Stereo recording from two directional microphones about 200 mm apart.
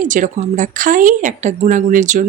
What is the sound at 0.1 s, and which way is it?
A woman's voice, 40° right (ahead or behind).